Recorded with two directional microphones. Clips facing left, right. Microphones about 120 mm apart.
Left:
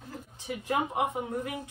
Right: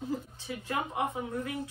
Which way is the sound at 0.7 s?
20° left (ahead or behind).